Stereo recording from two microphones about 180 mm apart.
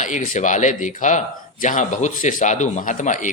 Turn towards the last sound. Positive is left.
turn(degrees=45)  # may be behind; listen again after turning